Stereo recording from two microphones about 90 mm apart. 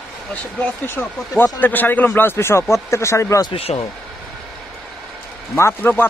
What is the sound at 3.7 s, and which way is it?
Speech, 70° left (ahead or behind).